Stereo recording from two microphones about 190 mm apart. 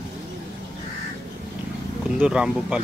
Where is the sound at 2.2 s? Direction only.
5° right (ahead or behind).